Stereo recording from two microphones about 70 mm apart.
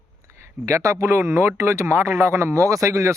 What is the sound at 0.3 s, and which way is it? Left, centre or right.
Speech, right.